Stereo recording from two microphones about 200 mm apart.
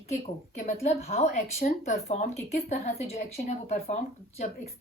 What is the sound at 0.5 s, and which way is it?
Speech, 35° left (ahead or behind).